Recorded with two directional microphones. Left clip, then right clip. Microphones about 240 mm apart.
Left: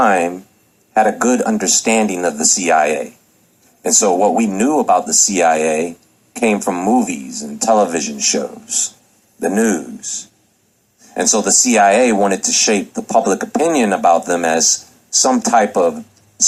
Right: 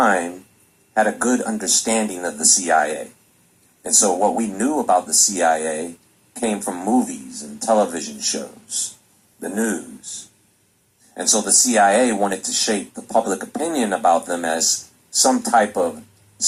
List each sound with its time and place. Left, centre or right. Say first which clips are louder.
0.0 s a sound: left 4 dB; left
0.9 s speech: left 5 dB; left
11.1 s speech: left 5 dB; left